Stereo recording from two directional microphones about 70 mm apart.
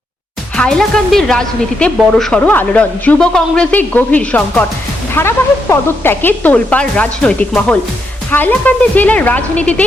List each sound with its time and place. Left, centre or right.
0.5 s a woman's voice: centre
2.4 s a woman's voice: left
3.2 s a woman's voice: centre
5.1 s a woman's voice: left; by 7.8 s centre
8.3 s a woman's voice: left